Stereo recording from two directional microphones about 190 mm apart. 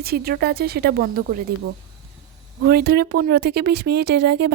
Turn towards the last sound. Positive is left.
turn(degrees=-60)  # may be behind; listen again after turning